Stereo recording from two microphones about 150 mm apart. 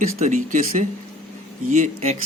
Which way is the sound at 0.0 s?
60° right (ahead or behind).